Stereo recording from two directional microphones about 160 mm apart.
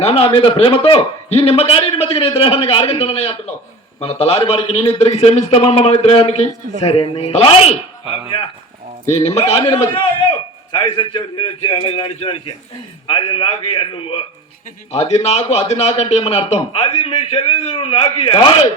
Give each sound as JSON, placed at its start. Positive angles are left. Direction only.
{"t": 0.0, "sound": "a man's voice", "side_deg": 35}
{"t": 9.0, "sound": "a man's voice", "side_deg": 40}